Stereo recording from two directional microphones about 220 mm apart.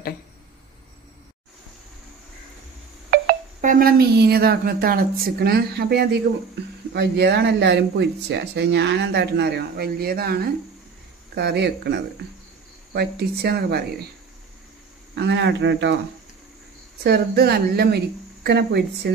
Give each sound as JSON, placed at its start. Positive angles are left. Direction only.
{"t": 3.1, "sound": "speech", "side_deg": -40}
{"t": 15.1, "sound": "speech", "side_deg": -50}
{"t": 17.0, "sound": "speech", "side_deg": -45}